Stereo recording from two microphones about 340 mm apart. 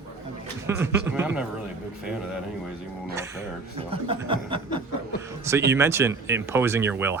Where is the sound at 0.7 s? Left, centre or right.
Centre.